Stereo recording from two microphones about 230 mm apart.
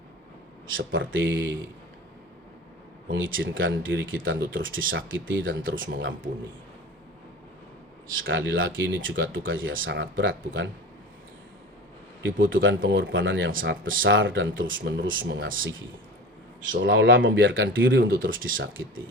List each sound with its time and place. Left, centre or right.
0.9 s speech: right
3.3 s speech: right
8.0 s speech: right
12.2 s speech: right
16.8 s speech: right